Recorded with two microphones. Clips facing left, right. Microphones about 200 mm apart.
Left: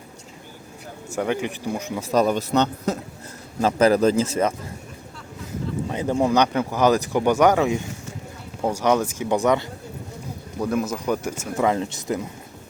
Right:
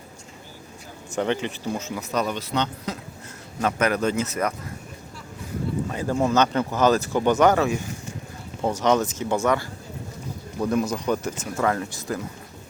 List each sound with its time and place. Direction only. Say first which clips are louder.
1.1 s speech: even; 10° left (ahead or behind)
2.0 s speech: left 8 dB; 30° left (ahead or behind)
2.2 s a man's voice: left 6 dB; 45° left (ahead or behind)
3.6 s speech: left 6 dB; 30° left (ahead or behind)
5.9 s speech: left 3 dB; 20° left (ahead or behind)
10.6 s speech: even; 5° left (ahead or behind); by 12.2 s 20° left (ahead or behind)